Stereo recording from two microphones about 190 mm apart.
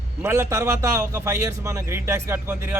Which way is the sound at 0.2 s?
15° right (ahead or behind).